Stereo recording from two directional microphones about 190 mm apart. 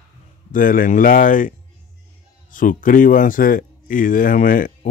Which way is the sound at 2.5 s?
45° left (ahead or behind).